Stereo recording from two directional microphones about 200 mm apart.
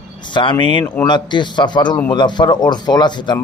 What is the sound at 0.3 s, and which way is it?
Speech, 25° left (ahead or behind).